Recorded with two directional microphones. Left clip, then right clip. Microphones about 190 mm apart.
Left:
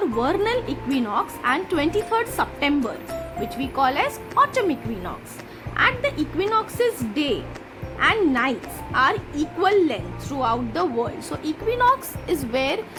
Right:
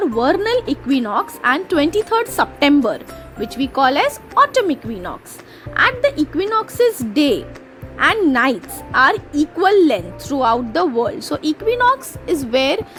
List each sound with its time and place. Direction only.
0.0 s a woman's voice: 35° right (ahead or behind)